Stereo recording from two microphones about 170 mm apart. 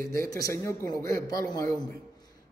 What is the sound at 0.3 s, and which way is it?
Speech, 20° left (ahead or behind).